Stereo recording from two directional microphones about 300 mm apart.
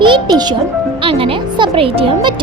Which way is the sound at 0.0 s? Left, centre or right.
Centre.